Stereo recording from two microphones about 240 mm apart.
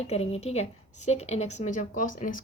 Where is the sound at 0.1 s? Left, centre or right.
Left.